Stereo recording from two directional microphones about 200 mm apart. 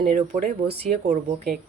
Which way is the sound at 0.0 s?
45° right (ahead or behind).